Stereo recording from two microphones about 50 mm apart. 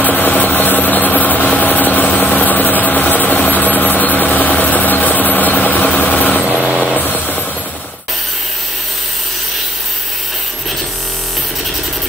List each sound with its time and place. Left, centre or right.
0.3 s vehicle: left
6.4 s vehicle: centre
7.0 s vehicle: left